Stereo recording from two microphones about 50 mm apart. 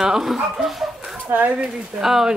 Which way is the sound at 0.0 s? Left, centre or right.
Centre.